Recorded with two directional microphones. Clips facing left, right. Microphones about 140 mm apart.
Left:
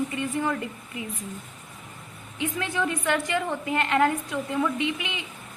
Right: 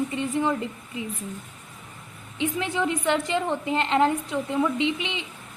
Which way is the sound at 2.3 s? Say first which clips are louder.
Right 2 dB; 20° right (ahead or behind).